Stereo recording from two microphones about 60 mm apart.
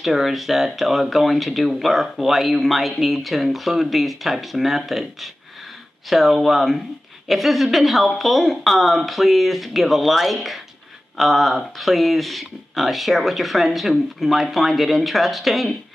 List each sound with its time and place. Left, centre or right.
0.0 s speech: centre